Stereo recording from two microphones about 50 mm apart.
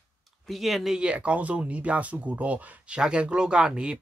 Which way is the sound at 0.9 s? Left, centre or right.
Right.